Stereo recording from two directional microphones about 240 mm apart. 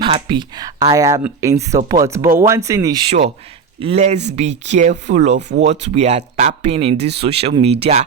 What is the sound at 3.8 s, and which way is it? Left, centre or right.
Speech, right.